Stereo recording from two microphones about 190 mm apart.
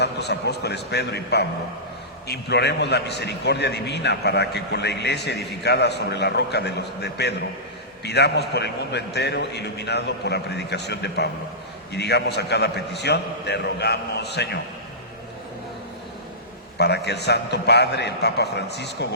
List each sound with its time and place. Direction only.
0.0 s a man's voice: 60° left (ahead or behind)
16.7 s a man's voice: 60° left (ahead or behind)